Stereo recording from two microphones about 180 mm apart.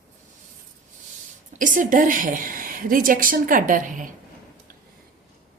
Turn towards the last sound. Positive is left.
turn(degrees=-45)  # may be behind; listen again after turning